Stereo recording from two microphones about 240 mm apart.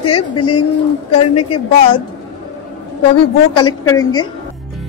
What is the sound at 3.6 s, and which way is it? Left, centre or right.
Speech, centre.